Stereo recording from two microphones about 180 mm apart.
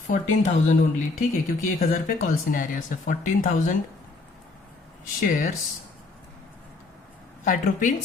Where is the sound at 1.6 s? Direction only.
50° left (ahead or behind).